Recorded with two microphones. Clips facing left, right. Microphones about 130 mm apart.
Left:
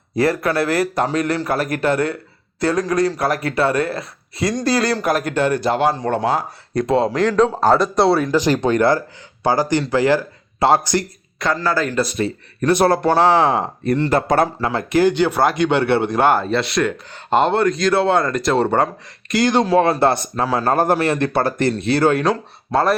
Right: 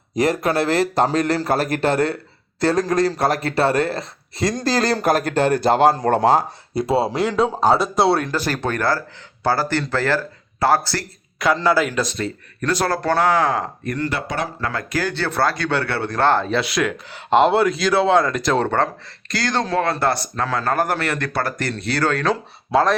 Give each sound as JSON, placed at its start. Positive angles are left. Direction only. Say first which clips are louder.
{"t": 0.2, "sound": "speech", "louder": "left 1 dB", "side_deg": -20}
{"t": 6.7, "sound": "speech", "louder": "left 2 dB", "side_deg": -10}
{"t": 8.3, "sound": "speech", "louder": "left 7 dB", "side_deg": 15}
{"t": 11.5, "sound": "a man's voice", "louder": "right 2 dB", "side_deg": -10}
{"t": 12.1, "sound": "speech", "louder": "left 4 dB", "side_deg": 20}
{"t": 14.2, "sound": "speech", "louder": "left 9 dB", "side_deg": 50}
{"t": 14.6, "sound": "speech", "louder": "left 8 dB", "side_deg": 25}
{"t": 16.4, "sound": "speech", "louder": "left 2 dB", "side_deg": 0}